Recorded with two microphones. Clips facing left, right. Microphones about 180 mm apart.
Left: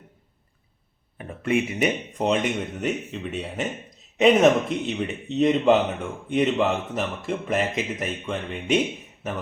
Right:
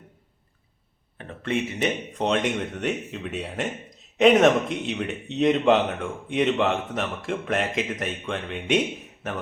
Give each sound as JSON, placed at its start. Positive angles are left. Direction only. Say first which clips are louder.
{"t": 1.2, "sound": "speech", "louder": "left 3 dB", "side_deg": 10}